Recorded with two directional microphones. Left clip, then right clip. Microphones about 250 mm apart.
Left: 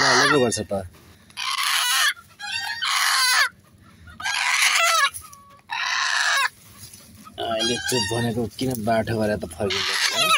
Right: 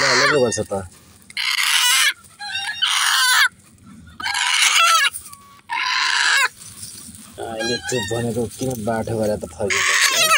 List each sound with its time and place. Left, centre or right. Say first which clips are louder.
0.0 s a sound: right 2 dB; centre
0.6 s speech: right 3 dB; left
1.3 s chicken: right 5 dB; centre
2.8 s baby cry: right 4 dB; centre
4.2 s chicken: right 3 dB; centre
5.7 s a sound: right 4 dB; centre
7.3 s music: even; centre
7.8 s music: even; centre
8.1 s speech: right 3 dB; centre